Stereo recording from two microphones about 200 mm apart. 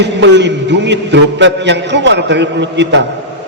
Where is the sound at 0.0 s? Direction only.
60° right (ahead or behind).